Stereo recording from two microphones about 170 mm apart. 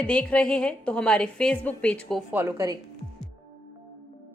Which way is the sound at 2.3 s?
15° right (ahead or behind).